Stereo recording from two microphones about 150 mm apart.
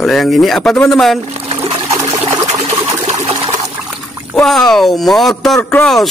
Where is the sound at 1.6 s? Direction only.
20° right (ahead or behind).